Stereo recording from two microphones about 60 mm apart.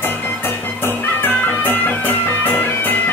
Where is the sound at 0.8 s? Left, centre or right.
Left.